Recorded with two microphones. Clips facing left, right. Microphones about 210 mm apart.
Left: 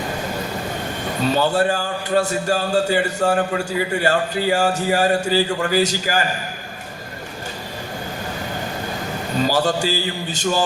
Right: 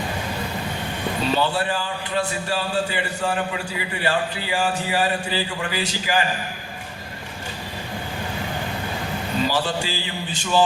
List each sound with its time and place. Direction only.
1.3 s a man's voice: 45° left (ahead or behind)
9.4 s a man's voice: 45° left (ahead or behind)